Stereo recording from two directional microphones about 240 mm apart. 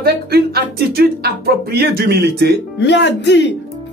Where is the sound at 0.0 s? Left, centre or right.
Right.